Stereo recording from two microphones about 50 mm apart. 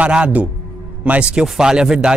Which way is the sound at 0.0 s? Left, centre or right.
Right.